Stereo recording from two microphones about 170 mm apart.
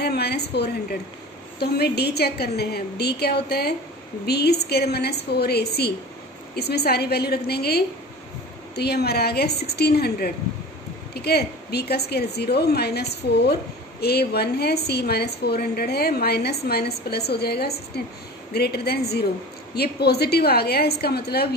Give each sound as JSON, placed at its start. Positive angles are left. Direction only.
{"t": 0.0, "sound": "a woman's voice", "side_deg": 70}